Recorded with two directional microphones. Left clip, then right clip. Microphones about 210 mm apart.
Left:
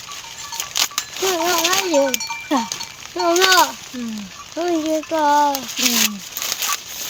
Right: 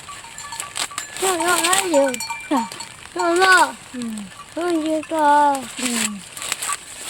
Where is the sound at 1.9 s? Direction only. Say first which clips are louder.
Right 1 dB; 55° right (ahead or behind).